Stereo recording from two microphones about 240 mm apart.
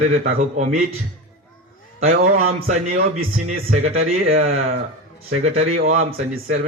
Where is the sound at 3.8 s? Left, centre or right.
Right.